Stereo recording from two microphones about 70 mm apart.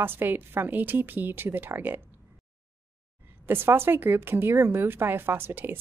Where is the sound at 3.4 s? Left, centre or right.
Right.